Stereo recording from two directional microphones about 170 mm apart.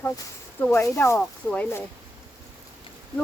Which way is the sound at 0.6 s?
15° left (ahead or behind).